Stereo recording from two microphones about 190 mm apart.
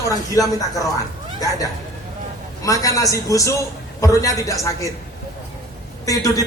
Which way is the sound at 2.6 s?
15° left (ahead or behind).